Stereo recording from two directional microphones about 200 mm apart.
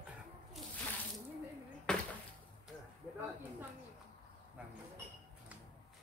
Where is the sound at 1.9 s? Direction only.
5° left (ahead or behind).